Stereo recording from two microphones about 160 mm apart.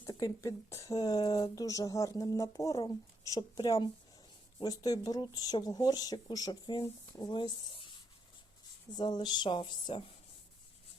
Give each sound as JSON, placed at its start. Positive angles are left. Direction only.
{"t": 0.0, "sound": "speech", "side_deg": 20}